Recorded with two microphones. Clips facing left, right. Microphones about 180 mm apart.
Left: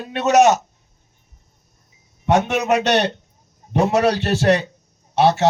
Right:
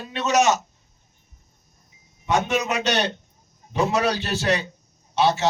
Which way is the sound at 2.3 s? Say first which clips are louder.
Left 5 dB; 65° left (ahead or behind).